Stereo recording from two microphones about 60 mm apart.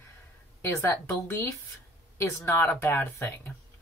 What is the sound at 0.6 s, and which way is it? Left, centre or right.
A woman's voice, left.